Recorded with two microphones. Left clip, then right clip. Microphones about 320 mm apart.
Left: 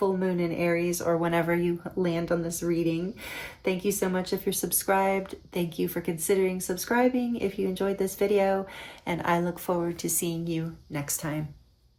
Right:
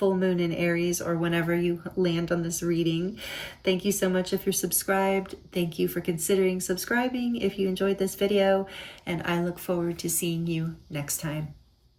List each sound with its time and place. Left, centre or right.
0.2 s speech: centre